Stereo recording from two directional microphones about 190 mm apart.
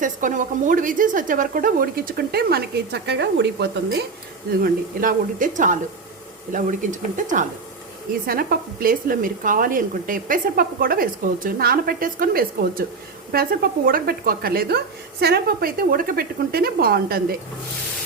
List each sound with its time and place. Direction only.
0.0 s speech: 40° right (ahead or behind); by 3.7 s 65° right (ahead or behind)
4.6 s a woman's voice: 50° right (ahead or behind)